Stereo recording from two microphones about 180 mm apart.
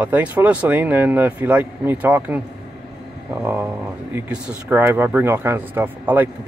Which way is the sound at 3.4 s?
15° right (ahead or behind).